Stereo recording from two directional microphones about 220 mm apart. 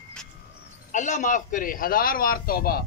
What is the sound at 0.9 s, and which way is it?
A man's voice, 35° left (ahead or behind).